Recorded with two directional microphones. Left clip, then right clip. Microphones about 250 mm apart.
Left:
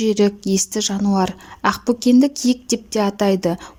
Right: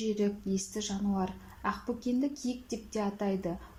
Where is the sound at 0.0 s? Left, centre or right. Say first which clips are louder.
Left 15 dB; left.